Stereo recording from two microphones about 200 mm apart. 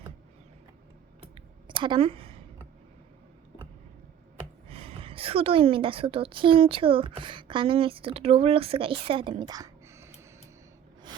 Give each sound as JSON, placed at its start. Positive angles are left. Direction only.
{"t": 1.2, "sound": "typing", "side_deg": -25}
{"t": 4.7, "sound": "a woman's voice", "side_deg": -30}